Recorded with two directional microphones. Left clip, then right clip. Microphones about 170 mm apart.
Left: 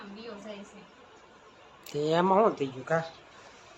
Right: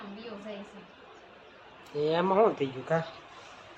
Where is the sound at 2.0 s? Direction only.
25° left (ahead or behind).